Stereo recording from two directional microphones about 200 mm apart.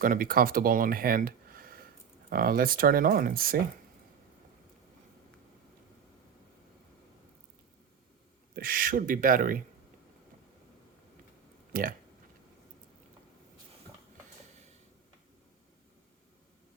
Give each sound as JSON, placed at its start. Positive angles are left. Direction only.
{"t": 0.0, "sound": "speech", "side_deg": -45}
{"t": 8.5, "sound": "speech", "side_deg": -45}
{"t": 11.7, "sound": "speech", "side_deg": -45}